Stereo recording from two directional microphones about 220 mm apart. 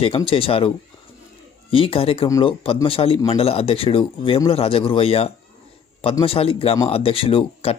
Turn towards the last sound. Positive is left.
turn(degrees=25)  # may be behind; listen again after turning